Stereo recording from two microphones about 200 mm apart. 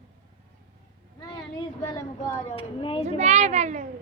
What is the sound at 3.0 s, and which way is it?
Speech, 35° right (ahead or behind).